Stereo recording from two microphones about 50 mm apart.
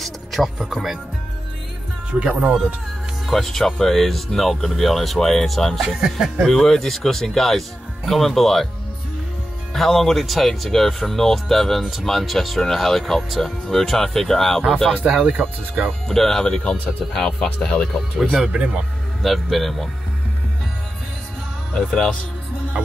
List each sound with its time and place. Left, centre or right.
0.0 s music: centre
2.0 s speech: right
2.3 s speech: centre
3.3 s speech: centre
5.9 s speech: centre
6.4 s speech: centre
9.8 s speech: centre
15.2 s speech: right
16.1 s speech: centre
16.4 s speech: left
17.6 s speech: left
18.5 s speech: right
19.2 s speech: centre
21.7 s speech: centre